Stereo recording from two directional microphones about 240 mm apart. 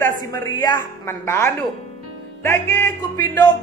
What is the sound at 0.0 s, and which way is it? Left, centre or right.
Speech, centre.